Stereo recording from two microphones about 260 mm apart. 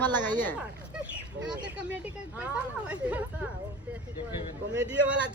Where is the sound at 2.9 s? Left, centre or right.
Centre.